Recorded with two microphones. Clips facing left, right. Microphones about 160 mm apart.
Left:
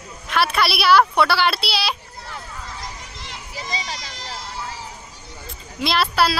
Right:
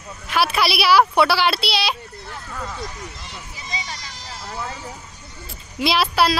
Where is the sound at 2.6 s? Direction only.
90° left.